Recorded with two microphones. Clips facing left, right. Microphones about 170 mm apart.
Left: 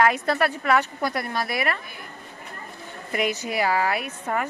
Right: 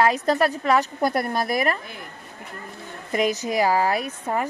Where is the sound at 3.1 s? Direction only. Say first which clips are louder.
Right 3 dB; 40° right (ahead or behind).